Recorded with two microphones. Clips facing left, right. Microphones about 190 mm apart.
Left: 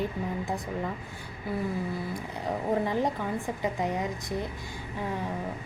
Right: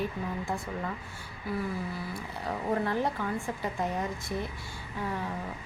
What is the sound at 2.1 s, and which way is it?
Speech, 15° left (ahead or behind).